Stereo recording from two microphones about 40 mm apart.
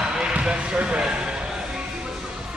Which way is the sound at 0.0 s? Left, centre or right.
Centre.